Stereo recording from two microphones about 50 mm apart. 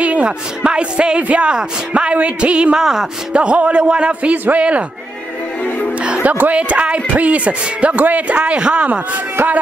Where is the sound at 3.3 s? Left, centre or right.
Right.